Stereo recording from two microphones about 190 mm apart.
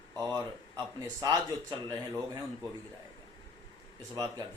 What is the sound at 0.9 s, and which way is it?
Speech, 20° right (ahead or behind).